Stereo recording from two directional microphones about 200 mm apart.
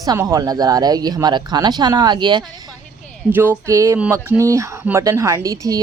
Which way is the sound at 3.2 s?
10° right (ahead or behind).